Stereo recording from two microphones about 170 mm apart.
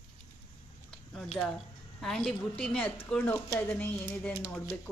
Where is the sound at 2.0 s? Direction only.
5° left (ahead or behind).